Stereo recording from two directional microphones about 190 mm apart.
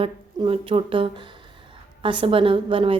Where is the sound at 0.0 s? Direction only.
30° right (ahead or behind).